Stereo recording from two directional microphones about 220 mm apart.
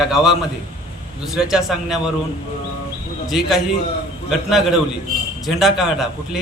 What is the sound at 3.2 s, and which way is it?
A man's voice, centre (ahead or behind).